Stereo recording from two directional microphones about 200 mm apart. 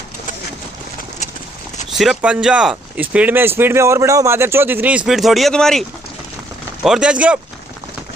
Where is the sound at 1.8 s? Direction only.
Centre (ahead or behind).